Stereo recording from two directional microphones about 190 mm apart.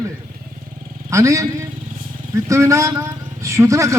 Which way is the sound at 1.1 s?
15° right (ahead or behind).